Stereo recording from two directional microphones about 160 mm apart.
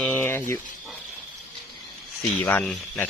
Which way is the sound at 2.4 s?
5° left (ahead or behind).